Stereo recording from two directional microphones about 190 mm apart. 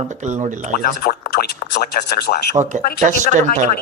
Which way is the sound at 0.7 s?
50° left (ahead or behind).